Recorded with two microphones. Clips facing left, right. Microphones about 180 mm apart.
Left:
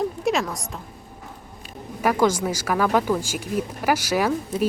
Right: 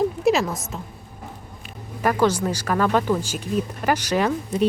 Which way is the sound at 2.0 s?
10° left (ahead or behind).